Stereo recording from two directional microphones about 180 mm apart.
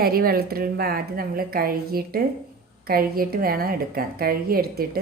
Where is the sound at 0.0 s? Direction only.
55° right (ahead or behind).